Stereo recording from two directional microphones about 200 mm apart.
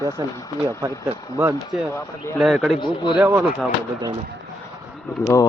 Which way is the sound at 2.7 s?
25° left (ahead or behind).